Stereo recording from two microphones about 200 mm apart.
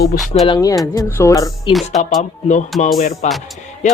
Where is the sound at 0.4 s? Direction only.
20° left (ahead or behind).